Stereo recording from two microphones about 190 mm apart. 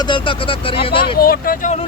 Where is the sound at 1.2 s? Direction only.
50° left (ahead or behind).